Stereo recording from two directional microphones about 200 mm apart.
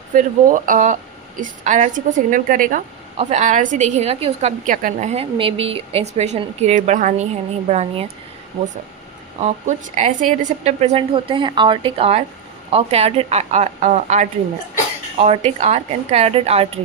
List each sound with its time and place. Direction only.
0.1 s a woman's voice: 40° right (ahead or behind)
9.4 s a woman's voice: 35° right (ahead or behind)